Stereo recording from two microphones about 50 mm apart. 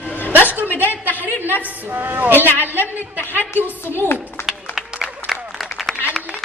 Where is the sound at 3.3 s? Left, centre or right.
Right.